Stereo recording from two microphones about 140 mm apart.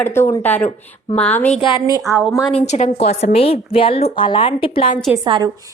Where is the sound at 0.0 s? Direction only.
20° left (ahead or behind).